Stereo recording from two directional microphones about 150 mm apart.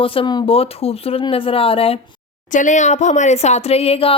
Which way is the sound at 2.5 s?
55° left (ahead or behind).